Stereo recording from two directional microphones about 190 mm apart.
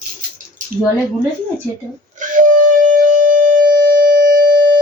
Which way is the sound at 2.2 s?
45° right (ahead or behind).